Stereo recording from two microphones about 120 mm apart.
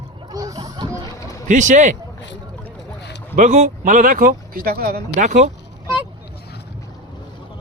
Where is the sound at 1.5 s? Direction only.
90° right.